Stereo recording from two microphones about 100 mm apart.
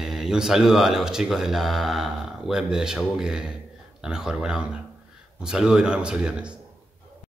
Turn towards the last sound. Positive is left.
turn(degrees=-10)  # may be behind; listen again after turning